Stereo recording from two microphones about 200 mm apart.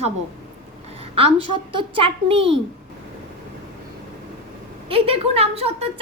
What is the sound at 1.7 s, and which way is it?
Speech, 25° right (ahead or behind).